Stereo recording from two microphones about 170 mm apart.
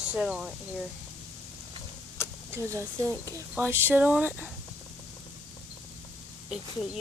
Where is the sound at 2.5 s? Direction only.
15° right (ahead or behind).